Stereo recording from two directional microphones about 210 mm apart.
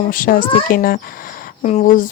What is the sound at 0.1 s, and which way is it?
Speech, 40° left (ahead or behind).